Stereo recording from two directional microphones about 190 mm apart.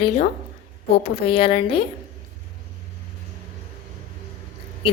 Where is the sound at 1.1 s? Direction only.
30° left (ahead or behind).